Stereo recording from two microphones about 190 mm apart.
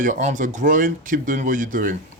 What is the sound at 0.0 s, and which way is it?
Speech, 40° right (ahead or behind).